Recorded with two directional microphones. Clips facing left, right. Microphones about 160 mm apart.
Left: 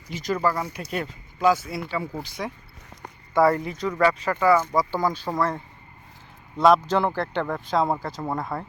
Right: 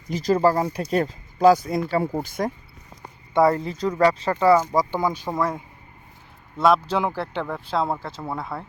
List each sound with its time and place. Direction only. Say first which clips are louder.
0.1 s speech: right 6 dB; 35° right (ahead or behind)
3.3 s speech: right 1 dB; 20° right (ahead or behind); by 8.6 s centre (ahead or behind)